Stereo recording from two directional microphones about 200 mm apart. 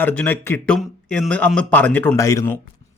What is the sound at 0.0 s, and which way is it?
Speech, 5° left (ahead or behind).